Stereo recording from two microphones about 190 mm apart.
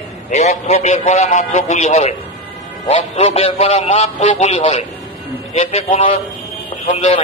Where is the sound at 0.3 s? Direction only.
35° left (ahead or behind).